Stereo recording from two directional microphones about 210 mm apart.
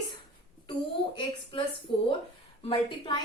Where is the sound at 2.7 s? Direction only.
25° left (ahead or behind).